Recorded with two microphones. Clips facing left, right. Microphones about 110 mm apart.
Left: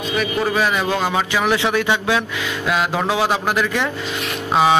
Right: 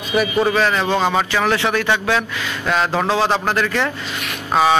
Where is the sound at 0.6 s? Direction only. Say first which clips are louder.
Right 2 dB; 10° left (ahead or behind).